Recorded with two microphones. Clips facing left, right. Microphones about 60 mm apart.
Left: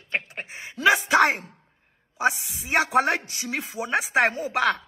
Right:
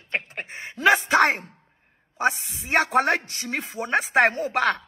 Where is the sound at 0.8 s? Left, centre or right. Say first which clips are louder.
Right 1 dB; right.